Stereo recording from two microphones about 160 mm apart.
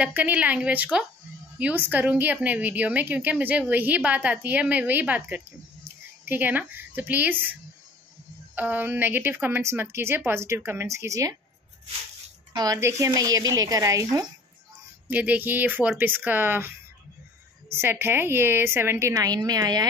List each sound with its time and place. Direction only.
0.0 s a woman's voice: 10° right (ahead or behind)
8.5 s a woman's voice: 10° right (ahead or behind)
12.5 s speech: 25° right (ahead or behind)
15.0 s a woman's voice: 10° right (ahead or behind)